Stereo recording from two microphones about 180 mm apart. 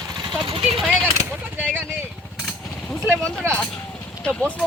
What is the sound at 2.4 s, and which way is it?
Jackhammer, 5° left (ahead or behind).